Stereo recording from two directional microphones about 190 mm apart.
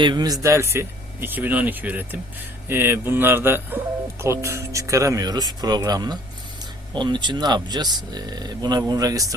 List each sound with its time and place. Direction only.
0.0 s speech: 20° right (ahead or behind)